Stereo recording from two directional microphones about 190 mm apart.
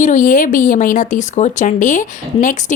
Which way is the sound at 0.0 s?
40° left (ahead or behind).